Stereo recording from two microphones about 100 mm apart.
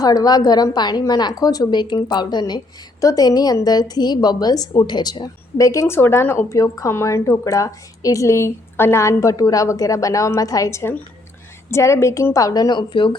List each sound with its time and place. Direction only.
0.0 s a woman's voice: 40° left (ahead or behind)